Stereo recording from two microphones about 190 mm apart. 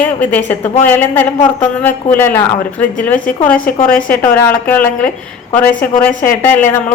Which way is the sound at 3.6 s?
10° left (ahead or behind).